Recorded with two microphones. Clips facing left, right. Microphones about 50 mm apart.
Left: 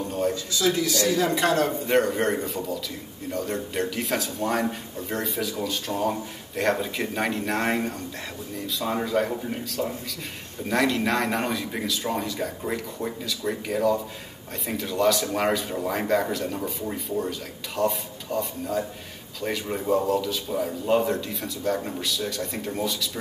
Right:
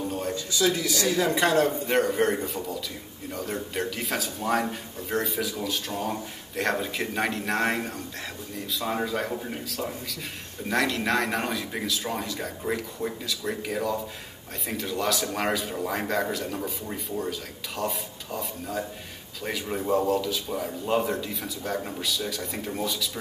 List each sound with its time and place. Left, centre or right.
0.3 s a man's voice: right
1.9 s a man's voice: centre